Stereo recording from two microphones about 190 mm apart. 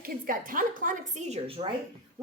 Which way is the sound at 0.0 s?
50° right (ahead or behind).